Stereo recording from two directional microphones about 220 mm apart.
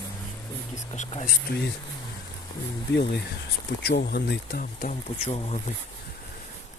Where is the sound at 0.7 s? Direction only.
35° left (ahead or behind).